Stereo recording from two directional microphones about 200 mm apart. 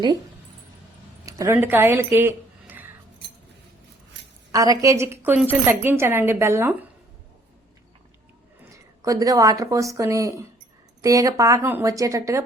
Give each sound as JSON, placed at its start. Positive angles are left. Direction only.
{"t": 1.2, "sound": "speech", "side_deg": -15}
{"t": 2.1, "sound": "a sound", "side_deg": -10}
{"t": 4.5, "sound": "speech", "side_deg": -20}
{"t": 8.7, "sound": "speech", "side_deg": -15}